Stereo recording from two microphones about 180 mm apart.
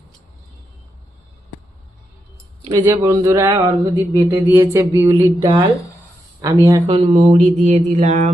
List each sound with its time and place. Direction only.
2.8 s a sound: 15° right (ahead or behind)
6.4 s speech: 20° right (ahead or behind)
6.8 s speech: 30° right (ahead or behind)